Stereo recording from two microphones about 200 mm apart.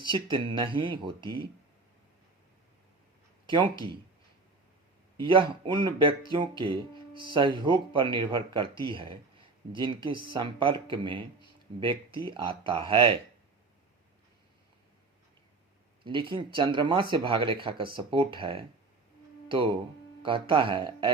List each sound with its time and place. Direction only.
0.1 s speech: 25° right (ahead or behind)
3.4 s a sound: 25° right (ahead or behind)
5.2 s speech: 25° right (ahead or behind)
16.0 s speech: 25° right (ahead or behind)